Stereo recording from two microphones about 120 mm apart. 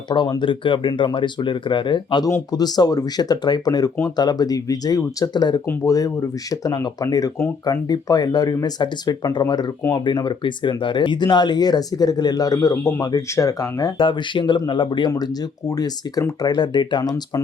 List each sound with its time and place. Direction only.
0.1 s speech: 40° left (ahead or behind)
14.0 s speech: 40° left (ahead or behind)
15.1 s speech: 30° left (ahead or behind)